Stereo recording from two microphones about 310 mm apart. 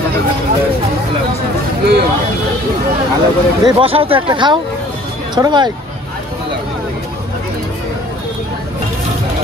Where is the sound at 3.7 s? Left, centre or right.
Centre.